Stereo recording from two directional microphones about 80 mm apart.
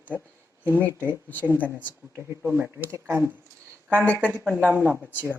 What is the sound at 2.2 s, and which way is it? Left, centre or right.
Speech, right.